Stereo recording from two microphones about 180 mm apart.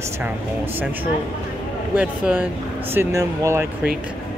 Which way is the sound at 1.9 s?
5° right (ahead or behind).